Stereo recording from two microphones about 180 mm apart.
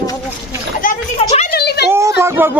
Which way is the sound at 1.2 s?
35° left (ahead or behind).